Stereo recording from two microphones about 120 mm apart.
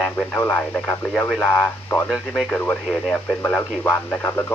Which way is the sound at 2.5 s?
15° left (ahead or behind).